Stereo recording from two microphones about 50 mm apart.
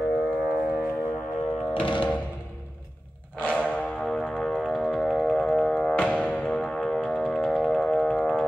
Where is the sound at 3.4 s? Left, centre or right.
Left.